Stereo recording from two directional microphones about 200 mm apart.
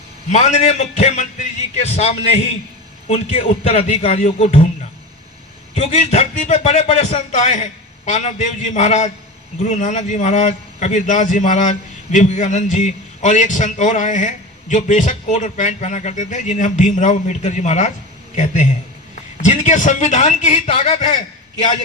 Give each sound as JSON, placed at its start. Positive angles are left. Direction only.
{"t": 0.3, "sound": "a man's voice", "side_deg": 35}
{"t": 5.7, "sound": "a man's voice", "side_deg": 35}